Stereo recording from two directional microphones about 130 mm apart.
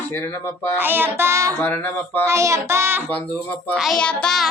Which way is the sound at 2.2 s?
25° right (ahead or behind).